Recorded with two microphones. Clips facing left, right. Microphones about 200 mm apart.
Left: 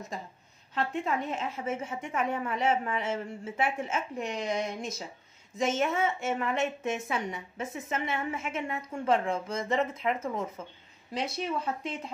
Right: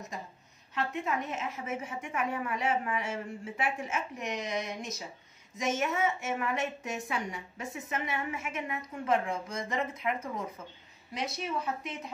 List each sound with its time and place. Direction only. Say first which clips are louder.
0.7 s a woman's voice: left 2 dB; 30° left (ahead or behind)